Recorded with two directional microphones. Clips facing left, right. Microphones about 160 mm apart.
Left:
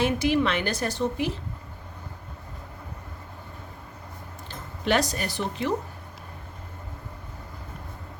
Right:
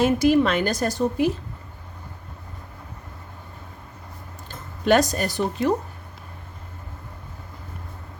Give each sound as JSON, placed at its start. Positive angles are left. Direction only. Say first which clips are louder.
{"t": 0.0, "sound": "a woman's voice", "louder": "right 5 dB", "side_deg": -45}
{"t": 4.9, "sound": "a woman's voice", "louder": "right 6 dB", "side_deg": -45}